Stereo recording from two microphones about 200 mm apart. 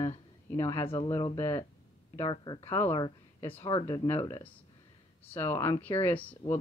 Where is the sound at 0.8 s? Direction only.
25° left (ahead or behind).